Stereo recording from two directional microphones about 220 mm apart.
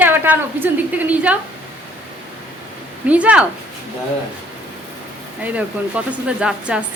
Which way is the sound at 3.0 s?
5° right (ahead or behind).